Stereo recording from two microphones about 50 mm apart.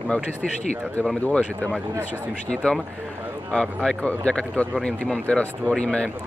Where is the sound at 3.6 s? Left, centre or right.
Centre.